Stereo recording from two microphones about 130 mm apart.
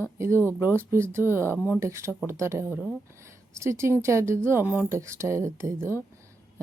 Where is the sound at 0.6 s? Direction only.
20° right (ahead or behind).